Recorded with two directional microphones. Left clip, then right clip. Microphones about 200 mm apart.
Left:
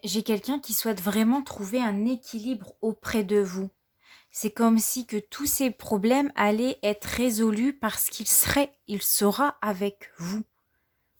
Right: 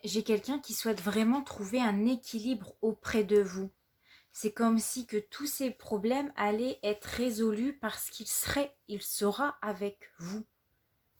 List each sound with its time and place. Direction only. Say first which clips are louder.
0.0 s a woman's voice: left 3 dB; 40° left (ahead or behind)